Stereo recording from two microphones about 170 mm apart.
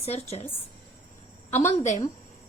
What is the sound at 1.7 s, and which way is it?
Speech, 45° left (ahead or behind).